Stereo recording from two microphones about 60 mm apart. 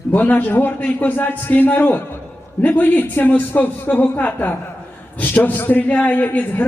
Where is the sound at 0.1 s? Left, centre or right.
Left.